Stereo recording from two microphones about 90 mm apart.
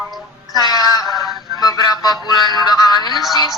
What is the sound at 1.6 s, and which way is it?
Music, 50° left (ahead or behind).